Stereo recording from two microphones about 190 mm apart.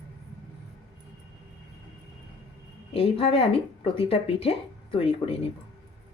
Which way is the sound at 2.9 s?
30° left (ahead or behind).